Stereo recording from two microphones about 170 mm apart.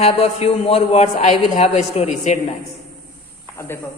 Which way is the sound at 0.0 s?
40° left (ahead or behind).